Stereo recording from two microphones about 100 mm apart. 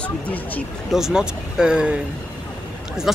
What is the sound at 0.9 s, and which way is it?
Speech, 5° right (ahead or behind).